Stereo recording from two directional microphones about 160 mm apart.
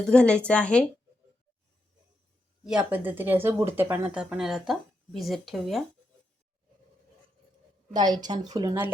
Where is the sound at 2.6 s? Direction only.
10° right (ahead or behind).